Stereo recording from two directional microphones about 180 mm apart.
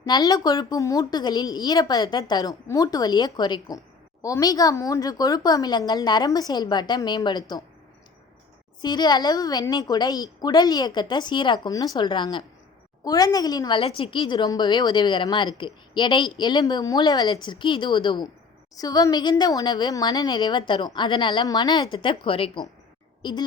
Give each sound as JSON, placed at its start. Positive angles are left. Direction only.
{"t": 0.0, "sound": "a woman's voice", "side_deg": 20}
{"t": 8.8, "sound": "a woman's voice", "side_deg": 25}